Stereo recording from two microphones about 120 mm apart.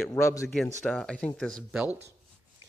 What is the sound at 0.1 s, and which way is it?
Speech, 25° left (ahead or behind).